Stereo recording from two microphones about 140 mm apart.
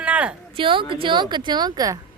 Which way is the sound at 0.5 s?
40° right (ahead or behind).